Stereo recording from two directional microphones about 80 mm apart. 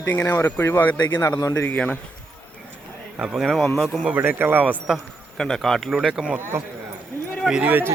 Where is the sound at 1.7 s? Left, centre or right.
Centre.